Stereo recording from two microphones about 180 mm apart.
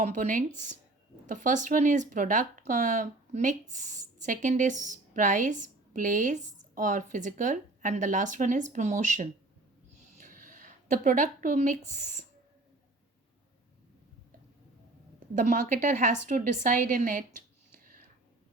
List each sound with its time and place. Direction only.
0.0 s speech: 45° right (ahead or behind)
10.2 s a sound: 45° right (ahead or behind)
11.9 s speech: 45° right (ahead or behind)
15.4 s speech: 45° right (ahead or behind)